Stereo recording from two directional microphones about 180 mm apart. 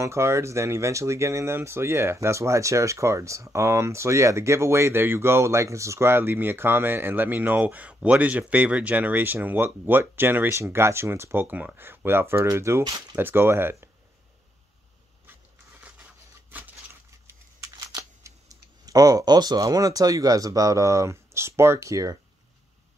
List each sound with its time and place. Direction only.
0.0 s speech: 15° right (ahead or behind)
17.6 s speech: 20° right (ahead or behind)